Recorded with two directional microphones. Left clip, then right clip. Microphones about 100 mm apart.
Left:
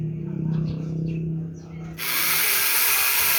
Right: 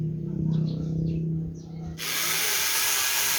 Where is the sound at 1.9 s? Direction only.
15° right (ahead or behind).